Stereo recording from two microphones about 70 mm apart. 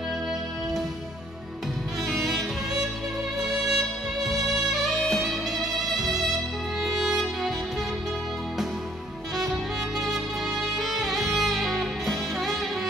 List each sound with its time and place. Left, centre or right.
2.1 s music: centre
10.8 s music: centre